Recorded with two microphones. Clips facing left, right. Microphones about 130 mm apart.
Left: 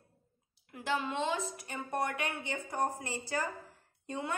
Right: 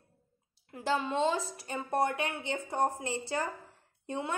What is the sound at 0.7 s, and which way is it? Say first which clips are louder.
A woman's voice: right 3 dB; 30° right (ahead or behind).